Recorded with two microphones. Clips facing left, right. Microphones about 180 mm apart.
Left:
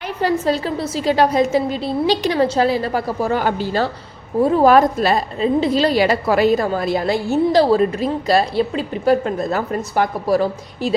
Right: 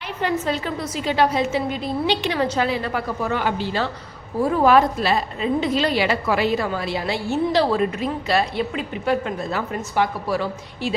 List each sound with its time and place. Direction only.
0.2 s a woman's voice: 35° left (ahead or behind)
4.4 s speech: 25° left (ahead or behind)
4.6 s a woman's voice: 45° left (ahead or behind)